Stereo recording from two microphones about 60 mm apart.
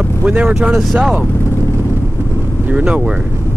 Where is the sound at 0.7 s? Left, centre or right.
Centre.